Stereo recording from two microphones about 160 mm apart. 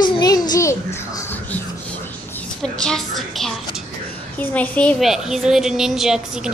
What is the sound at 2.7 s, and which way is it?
A woman's voice, 5° left (ahead or behind).